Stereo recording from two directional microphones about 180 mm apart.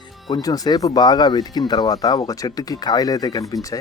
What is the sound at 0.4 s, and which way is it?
Speech, 20° left (ahead or behind).